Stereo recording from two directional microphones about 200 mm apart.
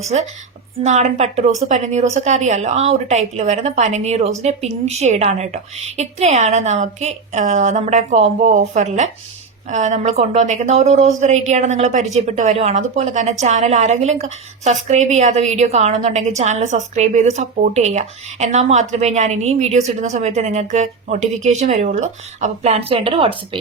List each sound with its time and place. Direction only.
0.0 s a woman's voice: 35° right (ahead or behind)